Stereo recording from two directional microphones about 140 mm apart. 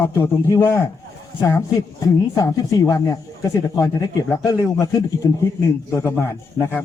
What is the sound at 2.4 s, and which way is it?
Speech, 25° left (ahead or behind).